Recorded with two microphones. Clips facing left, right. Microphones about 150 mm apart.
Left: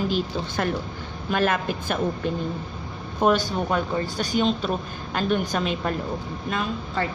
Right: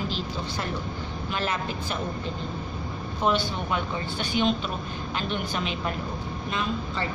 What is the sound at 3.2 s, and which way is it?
A woman's voice, 45° left (ahead or behind).